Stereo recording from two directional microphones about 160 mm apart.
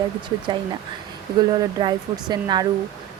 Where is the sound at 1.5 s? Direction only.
30° right (ahead or behind).